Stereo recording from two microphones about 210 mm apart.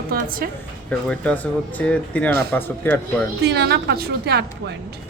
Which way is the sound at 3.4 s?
50° right (ahead or behind).